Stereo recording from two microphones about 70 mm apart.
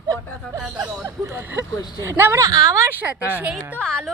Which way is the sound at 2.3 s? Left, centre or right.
Right.